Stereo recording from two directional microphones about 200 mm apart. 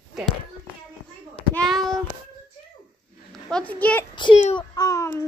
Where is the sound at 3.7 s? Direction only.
10° left (ahead or behind).